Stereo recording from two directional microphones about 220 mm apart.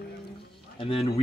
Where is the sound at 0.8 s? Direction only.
25° left (ahead or behind).